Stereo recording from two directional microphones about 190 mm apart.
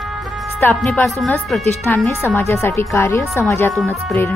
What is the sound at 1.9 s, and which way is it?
A woman's voice, 10° left (ahead or behind).